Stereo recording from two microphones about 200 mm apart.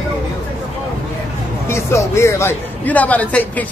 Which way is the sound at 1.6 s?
15° left (ahead or behind).